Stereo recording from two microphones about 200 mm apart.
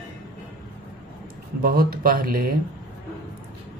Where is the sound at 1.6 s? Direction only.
45° right (ahead or behind).